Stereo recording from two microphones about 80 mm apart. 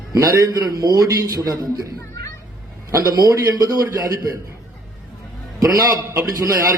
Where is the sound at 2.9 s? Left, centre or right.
Right.